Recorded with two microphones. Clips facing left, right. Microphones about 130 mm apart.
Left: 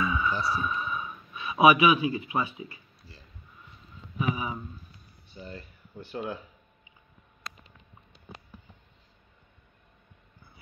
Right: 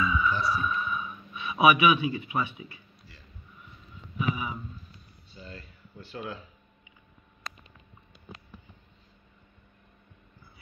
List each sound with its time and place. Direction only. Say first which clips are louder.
0.2 s speech: right 1 dB; 30° left (ahead or behind)
0.7 s a sound: right 1 dB; 25° left (ahead or behind)
1.3 s speech: left 2 dB; 35° left (ahead or behind)
4.2 s speech: left 1 dB; 35° left (ahead or behind)
5.4 s speech: left 3 dB; 20° left (ahead or behind)